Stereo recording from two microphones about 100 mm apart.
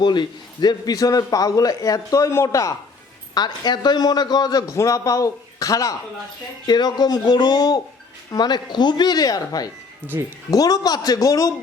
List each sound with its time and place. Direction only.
0.0 s a man's voice: 45° left (ahead or behind); by 2.7 s 30° left (ahead or behind)
3.3 s speech: 45° left (ahead or behind)
4.7 s a man's voice: 30° left (ahead or behind)
10.1 s speech: 20° right (ahead or behind)
10.5 s a man's voice: 40° left (ahead or behind)